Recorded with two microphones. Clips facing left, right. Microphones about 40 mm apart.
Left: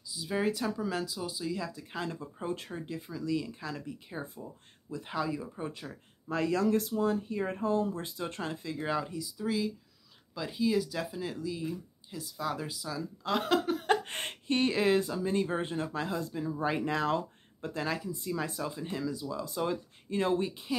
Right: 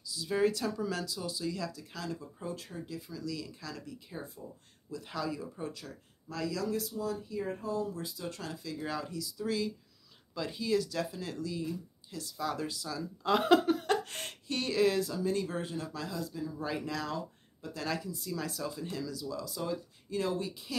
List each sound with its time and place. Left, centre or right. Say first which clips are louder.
0.0 s speech: right 2 dB; centre
13.2 s speech: right 4 dB; centre
13.8 s speech: left 3 dB; left
17.2 s a sound: left 4 dB; left
17.7 s speech: left 2 dB; centre